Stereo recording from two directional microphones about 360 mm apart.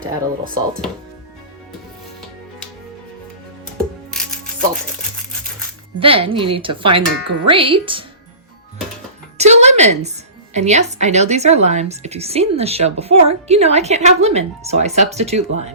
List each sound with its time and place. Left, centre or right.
0.0 s speech: right
6.0 s a woman's voice: centre
9.4 s music: centre
10.5 s a woman's voice: centre